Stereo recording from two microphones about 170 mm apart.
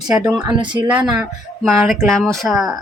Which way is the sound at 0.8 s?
5° right (ahead or behind).